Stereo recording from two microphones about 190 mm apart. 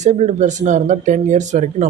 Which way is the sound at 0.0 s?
40° right (ahead or behind).